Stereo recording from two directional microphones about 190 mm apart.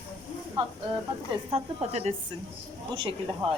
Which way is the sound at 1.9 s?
35° right (ahead or behind).